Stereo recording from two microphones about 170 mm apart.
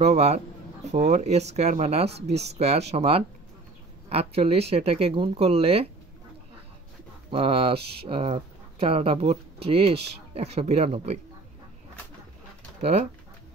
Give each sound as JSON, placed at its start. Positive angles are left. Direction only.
{"t": 0.0, "sound": "speech", "side_deg": -40}
{"t": 7.2, "sound": "speech", "side_deg": -35}